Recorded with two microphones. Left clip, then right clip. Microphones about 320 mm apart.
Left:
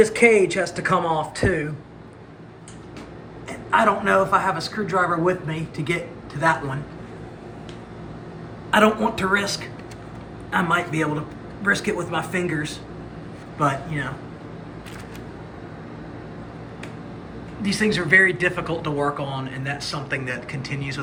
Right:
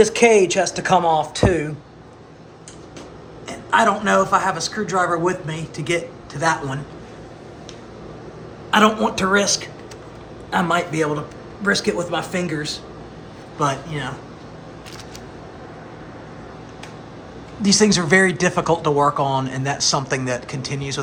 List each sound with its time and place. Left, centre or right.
0.0 s a man's voice: centre
3.7 s a man's voice: centre
8.7 s a man's voice: centre
17.6 s speech: centre